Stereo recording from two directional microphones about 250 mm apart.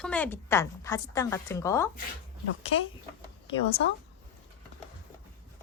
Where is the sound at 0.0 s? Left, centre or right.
Centre.